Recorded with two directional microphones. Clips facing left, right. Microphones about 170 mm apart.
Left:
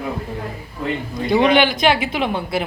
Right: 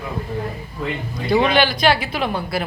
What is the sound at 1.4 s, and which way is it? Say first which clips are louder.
Speech: left 3 dB; 20° left (ahead or behind).